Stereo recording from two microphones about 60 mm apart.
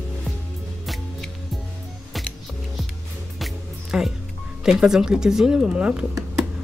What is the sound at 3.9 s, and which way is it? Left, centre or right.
Speech, centre.